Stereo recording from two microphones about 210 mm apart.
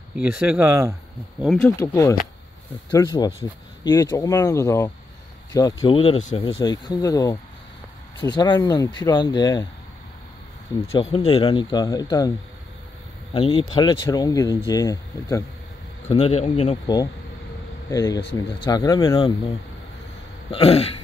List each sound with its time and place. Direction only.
0.1 s speech: 5° right (ahead or behind)
1.4 s speech: 5° left (ahead or behind)
1.8 s speech: 15° left (ahead or behind)
10.9 s speech: 25° left (ahead or behind)
16.1 s speech: 30° left (ahead or behind)
20.5 s speech: 30° left (ahead or behind)